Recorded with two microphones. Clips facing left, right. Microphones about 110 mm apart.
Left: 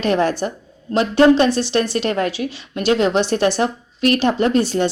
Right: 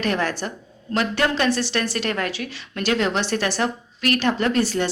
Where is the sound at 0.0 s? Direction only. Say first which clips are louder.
Left 6 dB; 20° left (ahead or behind).